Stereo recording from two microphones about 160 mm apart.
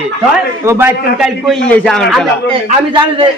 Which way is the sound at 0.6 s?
15° right (ahead or behind).